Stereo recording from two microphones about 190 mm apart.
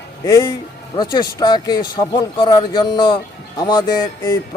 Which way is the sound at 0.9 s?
20° left (ahead or behind).